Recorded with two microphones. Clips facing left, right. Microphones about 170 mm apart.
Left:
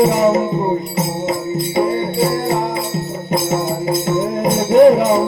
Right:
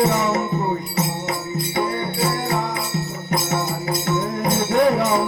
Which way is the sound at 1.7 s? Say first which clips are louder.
Left 7 dB; 25° left (ahead or behind).